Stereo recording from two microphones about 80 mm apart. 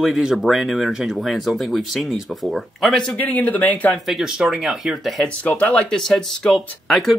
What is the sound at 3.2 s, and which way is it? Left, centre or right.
Speech, left.